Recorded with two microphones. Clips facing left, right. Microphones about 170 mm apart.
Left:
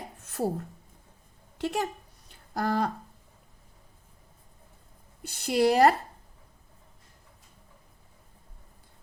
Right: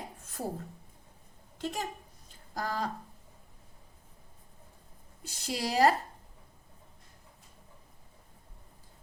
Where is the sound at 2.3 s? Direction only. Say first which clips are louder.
Left 7 dB; 65° left (ahead or behind).